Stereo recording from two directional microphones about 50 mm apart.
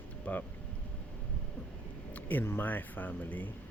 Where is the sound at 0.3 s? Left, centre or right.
Left.